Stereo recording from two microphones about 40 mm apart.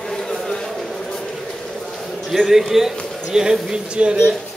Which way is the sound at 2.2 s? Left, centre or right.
Centre.